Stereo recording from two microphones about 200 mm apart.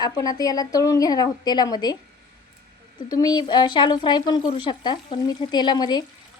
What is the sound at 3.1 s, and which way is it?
A woman's voice, 20° left (ahead or behind).